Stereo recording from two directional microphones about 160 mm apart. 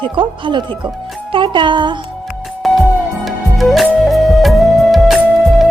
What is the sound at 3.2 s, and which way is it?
Music, centre (ahead or behind).